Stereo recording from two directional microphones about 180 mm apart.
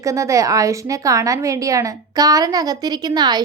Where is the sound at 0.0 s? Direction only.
15° right (ahead or behind).